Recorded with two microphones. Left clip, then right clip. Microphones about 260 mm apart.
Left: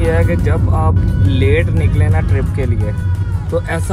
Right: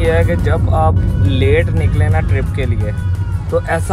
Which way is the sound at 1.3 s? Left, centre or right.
Right.